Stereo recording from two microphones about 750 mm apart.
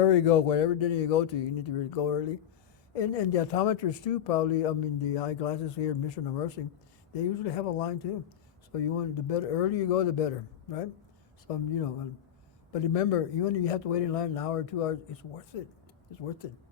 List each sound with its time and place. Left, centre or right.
0.0 s speech: left